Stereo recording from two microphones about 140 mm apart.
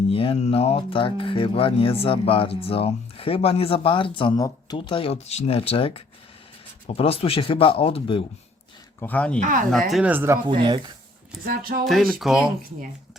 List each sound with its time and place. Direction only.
0.1 s speech: 40° left (ahead or behind)
4.4 s speech: 25° left (ahead or behind)
4.8 s speech: 40° left (ahead or behind)
9.0 s speech: 10° left (ahead or behind)
9.4 s speech: 70° right (ahead or behind)
9.6 s speech: centre (ahead or behind)
10.0 s speech: 15° right (ahead or behind)
10.4 s speech: 35° right (ahead or behind)
11.4 s speech: 90° right
11.9 s speech: centre (ahead or behind)